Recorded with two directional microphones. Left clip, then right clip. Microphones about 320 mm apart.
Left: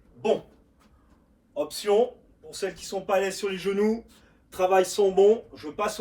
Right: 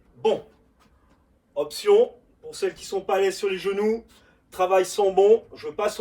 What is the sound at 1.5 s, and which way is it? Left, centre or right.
Speech, centre.